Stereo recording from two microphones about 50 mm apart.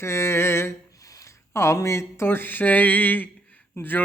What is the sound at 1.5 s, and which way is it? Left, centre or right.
Speech, left.